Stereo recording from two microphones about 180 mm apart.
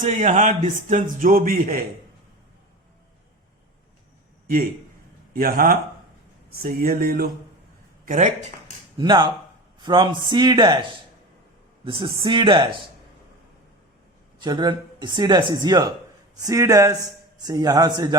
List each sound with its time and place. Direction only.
0.0 s a man's voice: 40° right (ahead or behind)
5.3 s a man's voice: 55° right (ahead or behind)
9.0 s speech: 25° right (ahead or behind)
11.9 s speech: 30° right (ahead or behind)
14.4 s speech: 25° right (ahead or behind)